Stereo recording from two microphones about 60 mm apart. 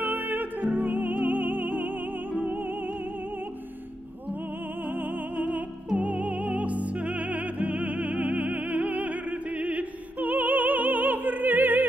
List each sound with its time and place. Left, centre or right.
0.0 s music: right
4.8 s music: right